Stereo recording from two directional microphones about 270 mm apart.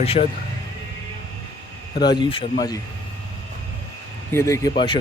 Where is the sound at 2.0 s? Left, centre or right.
Centre.